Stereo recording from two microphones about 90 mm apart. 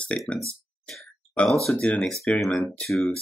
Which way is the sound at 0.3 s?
5° left (ahead or behind).